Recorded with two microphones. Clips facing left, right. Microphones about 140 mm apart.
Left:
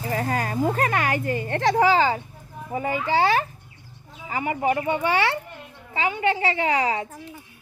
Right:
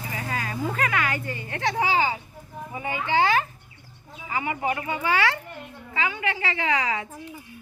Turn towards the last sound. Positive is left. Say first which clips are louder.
# left 3 dB
turn(degrees=35)  # may be behind; listen again after turning